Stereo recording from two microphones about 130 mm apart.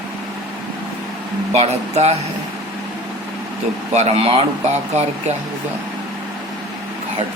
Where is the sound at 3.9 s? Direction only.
55° right (ahead or behind).